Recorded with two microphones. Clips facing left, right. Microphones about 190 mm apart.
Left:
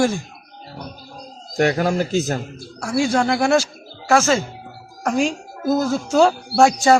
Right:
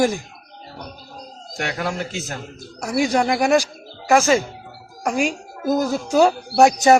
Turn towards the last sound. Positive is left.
turn(degrees=-20)  # may be behind; listen again after turning